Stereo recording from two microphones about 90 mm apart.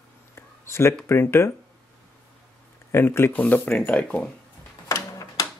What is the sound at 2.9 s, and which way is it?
Speech, 25° left (ahead or behind).